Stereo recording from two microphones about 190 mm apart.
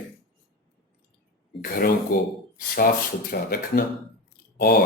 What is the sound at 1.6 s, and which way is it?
Speech, 50° left (ahead or behind).